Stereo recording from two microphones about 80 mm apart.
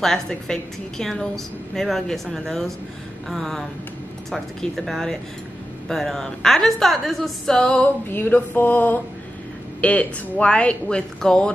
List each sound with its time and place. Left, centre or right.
0.0 s a woman's voice: centre
8.1 s a sound: left
9.8 s speech: centre